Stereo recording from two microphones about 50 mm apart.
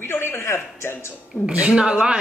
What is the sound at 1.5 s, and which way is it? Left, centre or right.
Speech, centre.